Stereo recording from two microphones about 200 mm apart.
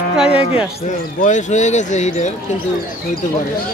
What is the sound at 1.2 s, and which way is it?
Speech, 35° left (ahead or behind).